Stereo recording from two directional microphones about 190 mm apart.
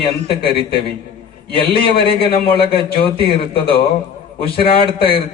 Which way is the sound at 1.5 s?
30° left (ahead or behind).